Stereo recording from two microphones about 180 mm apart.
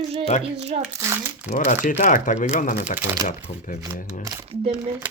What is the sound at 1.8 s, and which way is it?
Speech, 45° left (ahead or behind).